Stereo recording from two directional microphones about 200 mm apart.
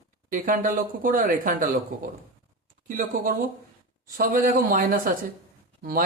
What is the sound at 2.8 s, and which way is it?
A man's voice, 45° right (ahead or behind).